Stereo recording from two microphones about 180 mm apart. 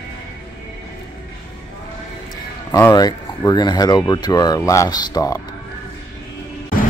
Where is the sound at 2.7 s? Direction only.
20° left (ahead or behind).